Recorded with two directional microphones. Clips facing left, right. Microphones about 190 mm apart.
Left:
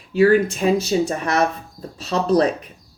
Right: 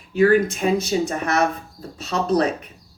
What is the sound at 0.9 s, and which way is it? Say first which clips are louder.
Speech: left 2 dB; 35° left (ahead or behind).